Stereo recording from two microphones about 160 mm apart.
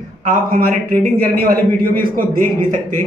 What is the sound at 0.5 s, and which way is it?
A man's voice, 65° right (ahead or behind).